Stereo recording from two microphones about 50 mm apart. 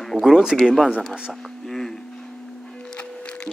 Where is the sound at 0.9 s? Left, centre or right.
Left.